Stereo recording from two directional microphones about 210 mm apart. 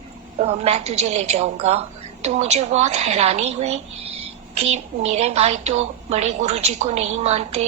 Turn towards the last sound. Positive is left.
turn(degrees=-30)  # may be behind; listen again after turning